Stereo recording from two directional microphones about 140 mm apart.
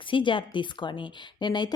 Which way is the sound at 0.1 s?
35° left (ahead or behind).